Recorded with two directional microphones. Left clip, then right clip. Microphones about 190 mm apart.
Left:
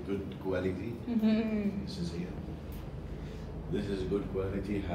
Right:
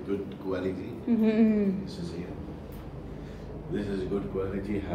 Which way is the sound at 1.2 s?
90° right.